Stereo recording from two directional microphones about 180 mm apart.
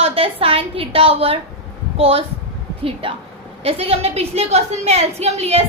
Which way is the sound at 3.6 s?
35° right (ahead or behind).